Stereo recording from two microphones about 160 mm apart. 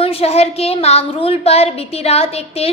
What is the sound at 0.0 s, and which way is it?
A woman's voice, 40° left (ahead or behind).